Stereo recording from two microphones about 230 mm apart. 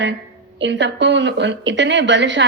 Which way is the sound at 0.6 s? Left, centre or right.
Right.